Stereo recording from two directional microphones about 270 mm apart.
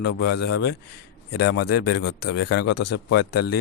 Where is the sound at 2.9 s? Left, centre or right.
Left.